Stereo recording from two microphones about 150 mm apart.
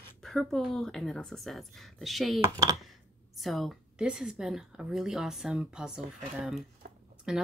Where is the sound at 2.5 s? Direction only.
25° right (ahead or behind).